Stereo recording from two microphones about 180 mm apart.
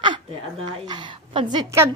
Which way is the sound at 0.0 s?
30° right (ahead or behind).